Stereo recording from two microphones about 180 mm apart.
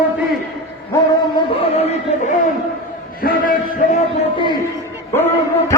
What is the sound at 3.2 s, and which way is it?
Speech, 50° left (ahead or behind).